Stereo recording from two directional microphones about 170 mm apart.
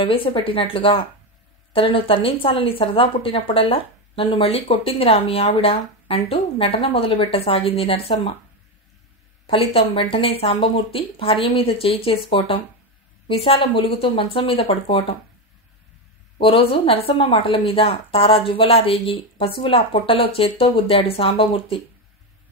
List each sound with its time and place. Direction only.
0.0 s speech: 30° left (ahead or behind)
9.8 s speech: 30° left (ahead or behind)
13.3 s speech: 35° left (ahead or behind)
16.3 s speech: 30° left (ahead or behind)